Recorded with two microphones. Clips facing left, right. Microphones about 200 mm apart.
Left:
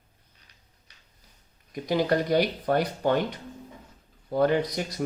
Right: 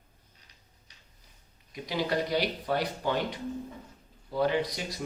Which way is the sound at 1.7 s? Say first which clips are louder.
Left 6 dB; 50° left (ahead or behind).